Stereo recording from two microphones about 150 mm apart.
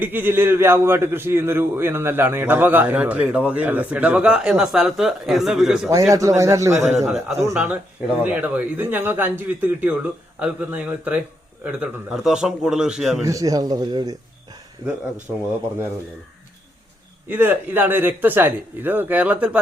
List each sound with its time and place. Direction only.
0.0 s a man's voice: 15° right (ahead or behind)
5.9 s speech: 20° right (ahead or behind)
7.0 s a man's voice: centre (ahead or behind)
7.3 s a man's voice: 15° right (ahead or behind)
13.2 s speech: 25° right (ahead or behind)
17.2 s a man's voice: 10° right (ahead or behind)